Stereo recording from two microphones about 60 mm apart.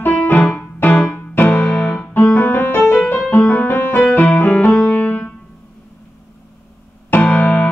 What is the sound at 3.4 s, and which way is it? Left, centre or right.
Music, left.